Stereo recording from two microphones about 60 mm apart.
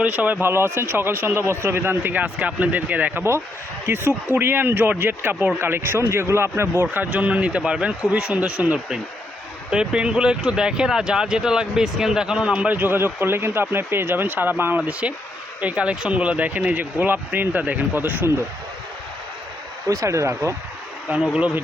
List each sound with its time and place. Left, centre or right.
0.0 s speech: right
0.4 s speech: right
2.2 s speech: right
3.8 s speech: right
6.9 s speech: right
12.8 s speech: right
19.9 s speech: right
21.1 s speech: right